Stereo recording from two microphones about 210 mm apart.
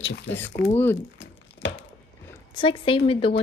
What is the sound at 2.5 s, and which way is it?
Speech, 25° left (ahead or behind).